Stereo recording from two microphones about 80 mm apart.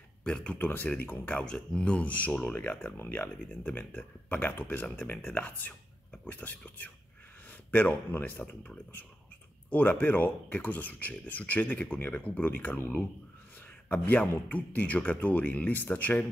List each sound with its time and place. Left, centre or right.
0.2 s speech: centre
1.4 s speech: centre